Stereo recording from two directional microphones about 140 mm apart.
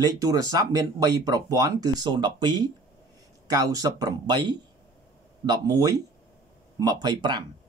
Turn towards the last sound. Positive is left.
turn(degrees=-30)  # may be behind; listen again after turning